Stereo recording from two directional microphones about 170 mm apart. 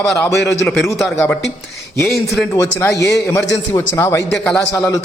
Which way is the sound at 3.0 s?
15° left (ahead or behind).